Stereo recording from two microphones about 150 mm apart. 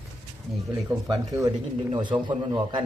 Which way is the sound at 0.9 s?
20° right (ahead or behind).